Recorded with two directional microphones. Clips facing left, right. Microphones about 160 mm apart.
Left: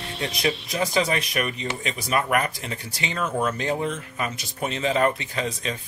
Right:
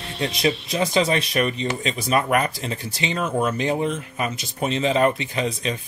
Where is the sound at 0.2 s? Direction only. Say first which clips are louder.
Right 4 dB; 30° right (ahead or behind).